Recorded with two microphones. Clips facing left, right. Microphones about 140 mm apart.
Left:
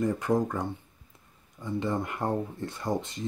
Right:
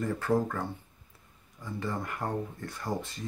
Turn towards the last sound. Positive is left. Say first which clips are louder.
# left 4 dB
turn(degrees=20)  # may be behind; listen again after turning